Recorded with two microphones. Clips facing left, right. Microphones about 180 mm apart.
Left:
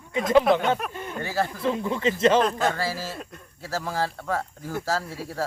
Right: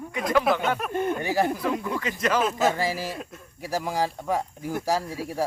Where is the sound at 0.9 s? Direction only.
55° right (ahead or behind).